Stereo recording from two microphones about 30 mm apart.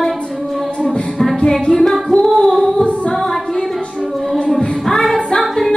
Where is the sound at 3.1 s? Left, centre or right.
Centre.